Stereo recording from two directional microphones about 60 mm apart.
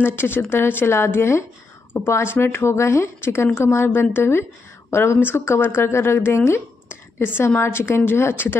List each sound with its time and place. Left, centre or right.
0.0 s a woman's voice: left